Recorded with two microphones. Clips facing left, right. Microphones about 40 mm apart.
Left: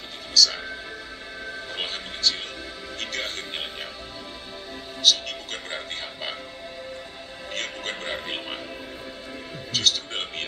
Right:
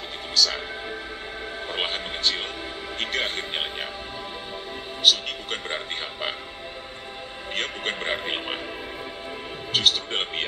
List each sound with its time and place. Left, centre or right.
0.3 s music: right
1.7 s speech: right
5.0 s speech: right
7.5 s speech: right
9.7 s speech: right